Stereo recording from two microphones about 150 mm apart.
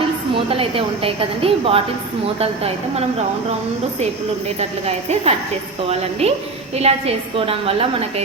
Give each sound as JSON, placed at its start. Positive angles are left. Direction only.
{"t": 0.3, "sound": "a woman's voice", "side_deg": -40}